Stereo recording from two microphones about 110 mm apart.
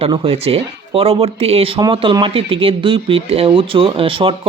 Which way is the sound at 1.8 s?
45° right (ahead or behind).